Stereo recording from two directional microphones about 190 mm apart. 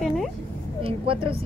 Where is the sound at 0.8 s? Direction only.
30° right (ahead or behind).